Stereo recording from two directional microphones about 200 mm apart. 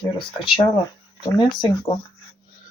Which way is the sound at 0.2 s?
25° left (ahead or behind).